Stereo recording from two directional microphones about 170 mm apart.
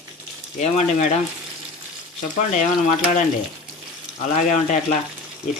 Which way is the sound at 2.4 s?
45° left (ahead or behind).